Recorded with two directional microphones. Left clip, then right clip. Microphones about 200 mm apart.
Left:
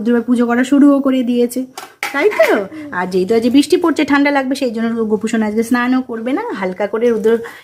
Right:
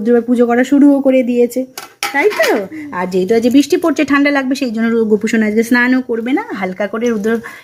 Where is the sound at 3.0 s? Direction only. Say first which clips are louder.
Right 1 dB; centre (ahead or behind).